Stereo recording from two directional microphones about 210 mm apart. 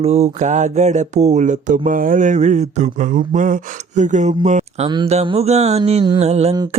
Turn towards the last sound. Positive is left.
turn(degrees=-30)  # may be behind; listen again after turning